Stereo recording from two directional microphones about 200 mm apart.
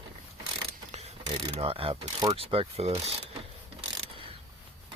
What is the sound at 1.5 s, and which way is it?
Pulleys, 30° right (ahead or behind).